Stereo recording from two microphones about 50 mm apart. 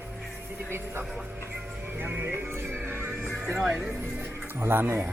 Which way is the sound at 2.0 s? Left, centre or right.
Right.